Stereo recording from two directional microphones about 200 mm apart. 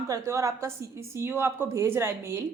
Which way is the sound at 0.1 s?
15° right (ahead or behind).